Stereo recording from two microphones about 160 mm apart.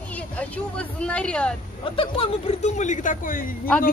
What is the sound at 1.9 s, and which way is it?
Speech, 35° left (ahead or behind).